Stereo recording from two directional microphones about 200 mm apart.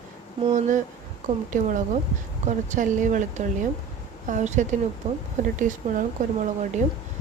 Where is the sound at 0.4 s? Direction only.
35° right (ahead or behind).